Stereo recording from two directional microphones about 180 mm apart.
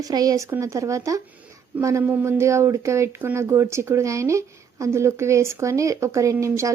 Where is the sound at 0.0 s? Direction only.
20° right (ahead or behind).